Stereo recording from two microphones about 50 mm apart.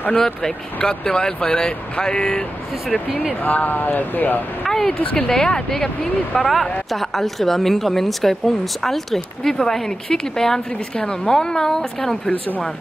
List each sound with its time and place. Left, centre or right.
0.1 s speech: centre
3.4 s speech: left
4.6 s speech: centre
4.9 s speech: centre
12.3 s speech: left